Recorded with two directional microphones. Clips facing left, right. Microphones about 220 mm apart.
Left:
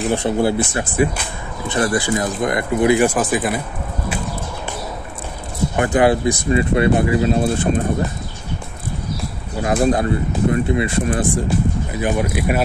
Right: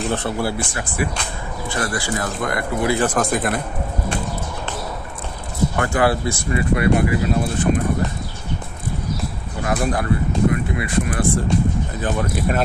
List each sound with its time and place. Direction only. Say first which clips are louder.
0.1 s speech: left 5 dB; 15° left (ahead or behind)
5.8 s speech: left 5 dB; 20° left (ahead or behind)
9.6 s speech: left 5 dB; 25° left (ahead or behind)
11.3 s speech: even; 10° left (ahead or behind)